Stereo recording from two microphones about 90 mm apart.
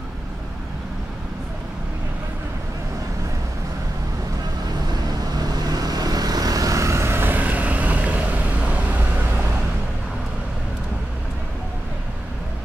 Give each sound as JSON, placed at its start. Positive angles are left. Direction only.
{"t": 5.4, "sound": "vehicle", "side_deg": -45}